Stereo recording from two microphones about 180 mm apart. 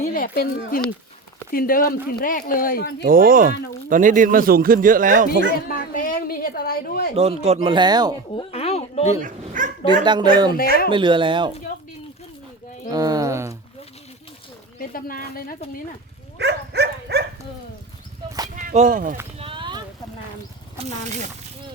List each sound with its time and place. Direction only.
0.0 s speech: 50° left (ahead or behind)
3.0 s a man's voice: 50° right (ahead or behind)
5.6 s speech: 50° left (ahead or behind)
7.2 s speech: 35° right (ahead or behind)
8.4 s a sound: 35° left (ahead or behind)
9.2 s a man's voice: 45° right (ahead or behind)
10.0 s speech: 25° right (ahead or behind)
12.9 s bird: 20° right (ahead or behind)
14.8 s speech: 55° left (ahead or behind)
16.4 s dog: 70° right (ahead or behind)
18.5 s speech: 40° right (ahead or behind)
19.4 s clip-clop: 30° right (ahead or behind)
20.7 s speech: 40° right (ahead or behind)